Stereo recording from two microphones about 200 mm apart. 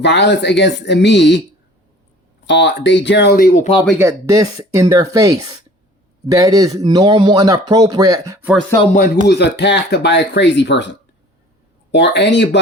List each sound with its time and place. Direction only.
0.0 s speech: 60° left (ahead or behind)
2.5 s speech: 60° left (ahead or behind); by 3.8 s 35° left (ahead or behind)
3.9 s speech: 15° right (ahead or behind)
8.8 s speech: 35° left (ahead or behind)
9.2 s speech: 55° left (ahead or behind)